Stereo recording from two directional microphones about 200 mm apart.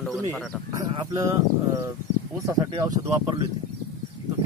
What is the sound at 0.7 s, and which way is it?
Speech, 15° right (ahead or behind).